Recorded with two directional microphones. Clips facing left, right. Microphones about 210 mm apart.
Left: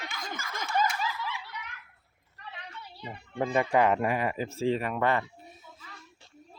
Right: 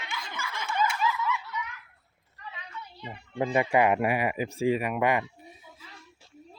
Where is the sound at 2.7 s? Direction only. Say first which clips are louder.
Right 2 dB; 30° left (ahead or behind).